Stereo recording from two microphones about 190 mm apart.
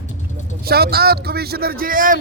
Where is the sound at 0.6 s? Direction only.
55° right (ahead or behind).